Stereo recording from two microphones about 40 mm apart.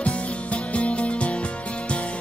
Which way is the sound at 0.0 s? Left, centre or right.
Left.